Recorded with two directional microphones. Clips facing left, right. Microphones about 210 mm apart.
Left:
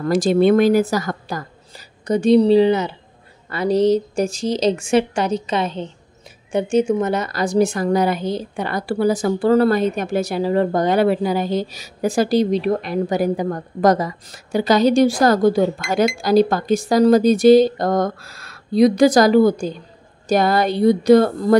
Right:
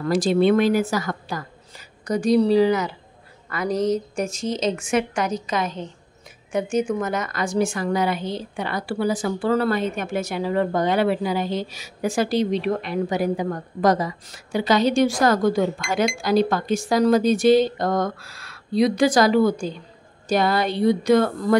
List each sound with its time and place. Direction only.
0.0 s a woman's voice: 45° left (ahead or behind)